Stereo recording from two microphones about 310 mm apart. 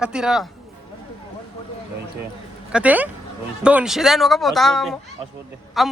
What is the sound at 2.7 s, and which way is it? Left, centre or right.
Speech, centre.